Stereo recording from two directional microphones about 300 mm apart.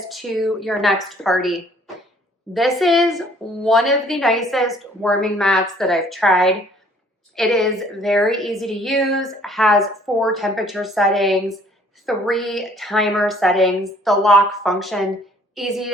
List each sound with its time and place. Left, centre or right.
0.1 s a woman's voice: centre